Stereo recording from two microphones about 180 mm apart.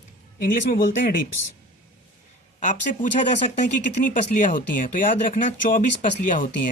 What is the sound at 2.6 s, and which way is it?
Speech, 45° left (ahead or behind).